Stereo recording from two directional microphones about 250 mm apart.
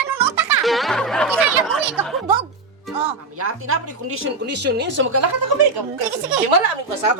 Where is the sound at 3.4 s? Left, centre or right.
Right.